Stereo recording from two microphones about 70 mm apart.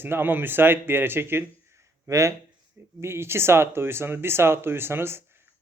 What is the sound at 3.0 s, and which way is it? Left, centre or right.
A man's voice, right.